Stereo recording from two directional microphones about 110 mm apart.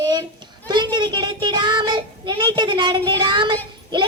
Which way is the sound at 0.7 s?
40° right (ahead or behind).